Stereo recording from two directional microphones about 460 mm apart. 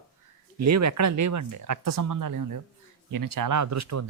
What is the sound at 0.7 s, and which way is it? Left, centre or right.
Speech, right.